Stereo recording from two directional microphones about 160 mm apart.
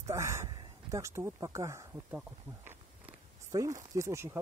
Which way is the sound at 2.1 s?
10° right (ahead or behind).